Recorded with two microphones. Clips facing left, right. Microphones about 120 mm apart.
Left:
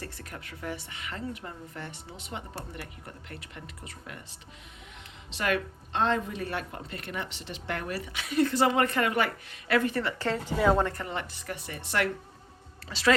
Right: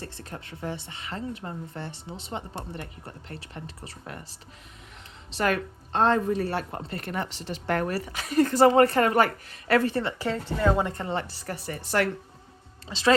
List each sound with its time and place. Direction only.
0.0 s speech: 30° right (ahead or behind)
10.4 s a woman's voice: 10° left (ahead or behind)
10.8 s speech: 25° right (ahead or behind)
12.9 s speech: 25° right (ahead or behind)